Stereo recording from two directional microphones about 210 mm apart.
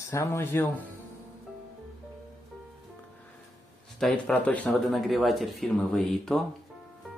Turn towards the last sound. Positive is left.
turn(degrees=0)  # may be behind; listen again after turning